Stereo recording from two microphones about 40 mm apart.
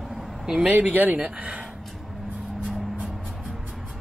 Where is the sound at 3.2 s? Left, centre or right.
Centre.